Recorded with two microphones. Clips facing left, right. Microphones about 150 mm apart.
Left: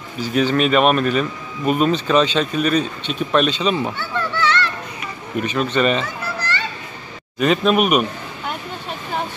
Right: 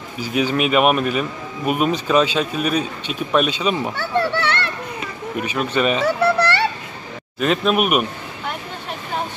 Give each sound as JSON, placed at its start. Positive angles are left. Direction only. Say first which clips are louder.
{"t": 0.2, "sound": "speech", "louder": "left 2 dB", "side_deg": -10}
{"t": 4.3, "sound": "children playing", "louder": "left 2 dB", "side_deg": -60}
{"t": 5.4, "sound": "speech", "louder": "left 2 dB", "side_deg": -10}
{"t": 6.0, "sound": "children playing", "louder": "right 10 dB", "side_deg": -70}
{"t": 7.3, "sound": "speech", "louder": "left 2 dB", "side_deg": 0}